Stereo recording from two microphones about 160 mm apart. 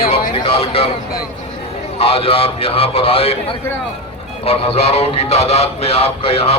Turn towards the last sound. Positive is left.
turn(degrees=35)  # may be behind; listen again after turning